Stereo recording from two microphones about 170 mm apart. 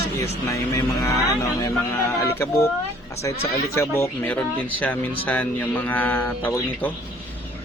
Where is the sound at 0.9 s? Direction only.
20° left (ahead or behind).